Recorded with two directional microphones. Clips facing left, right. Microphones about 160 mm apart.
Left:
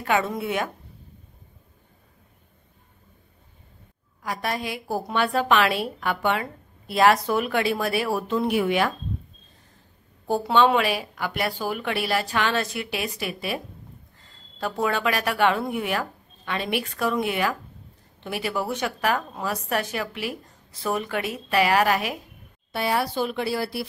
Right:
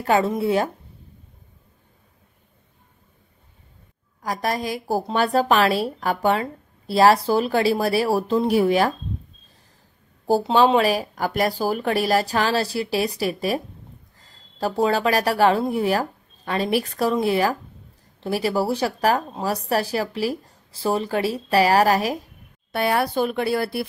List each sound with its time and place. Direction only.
0.0 s speech: 35° right (ahead or behind)
4.2 s speech: 40° right (ahead or behind)
10.5 s a woman's voice: 35° right (ahead or behind)
22.7 s speech: 55° right (ahead or behind)